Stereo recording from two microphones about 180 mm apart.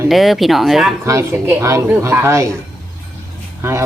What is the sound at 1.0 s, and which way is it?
Speech, 15° right (ahead or behind).